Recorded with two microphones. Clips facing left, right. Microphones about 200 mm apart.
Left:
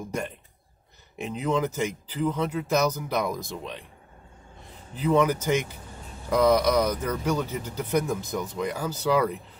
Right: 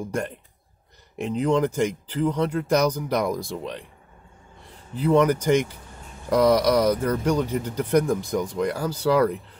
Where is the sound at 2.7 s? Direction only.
10° right (ahead or behind).